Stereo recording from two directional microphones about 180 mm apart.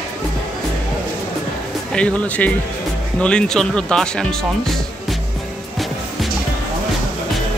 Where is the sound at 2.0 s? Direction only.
5° left (ahead or behind).